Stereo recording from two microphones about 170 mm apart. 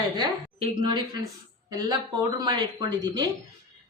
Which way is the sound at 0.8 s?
25° right (ahead or behind).